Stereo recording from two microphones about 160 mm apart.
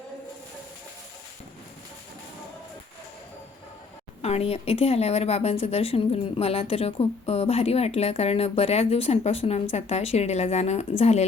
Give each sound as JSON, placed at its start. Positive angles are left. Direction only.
{"t": 4.2, "sound": "a woman's voice", "side_deg": 40}